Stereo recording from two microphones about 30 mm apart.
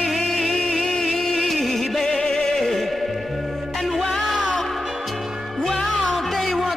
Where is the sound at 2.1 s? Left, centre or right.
Centre.